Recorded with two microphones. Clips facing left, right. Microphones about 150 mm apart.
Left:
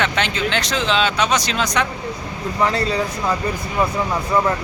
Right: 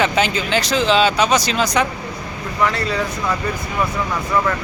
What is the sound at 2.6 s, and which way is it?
Speech, 30° left (ahead or behind).